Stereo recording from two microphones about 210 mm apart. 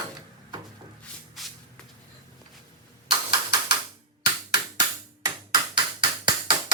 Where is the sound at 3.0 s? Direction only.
20° right (ahead or behind).